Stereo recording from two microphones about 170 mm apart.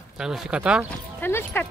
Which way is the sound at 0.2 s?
5° right (ahead or behind).